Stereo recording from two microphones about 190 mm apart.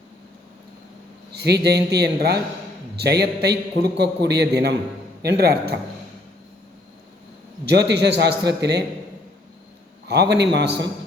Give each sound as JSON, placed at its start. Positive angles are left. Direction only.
{"t": 1.3, "sound": "a man's voice", "side_deg": -60}
{"t": 7.6, "sound": "a man's voice", "side_deg": -65}
{"t": 10.1, "sound": "a man's voice", "side_deg": -60}